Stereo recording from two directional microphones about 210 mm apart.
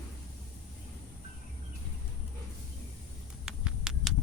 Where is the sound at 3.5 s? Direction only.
5° right (ahead or behind).